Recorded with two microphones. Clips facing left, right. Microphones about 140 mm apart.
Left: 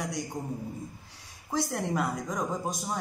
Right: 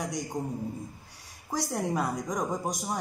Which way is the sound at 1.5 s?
15° right (ahead or behind).